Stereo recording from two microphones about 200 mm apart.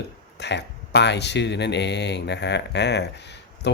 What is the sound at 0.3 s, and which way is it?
Speech, 60° left (ahead or behind).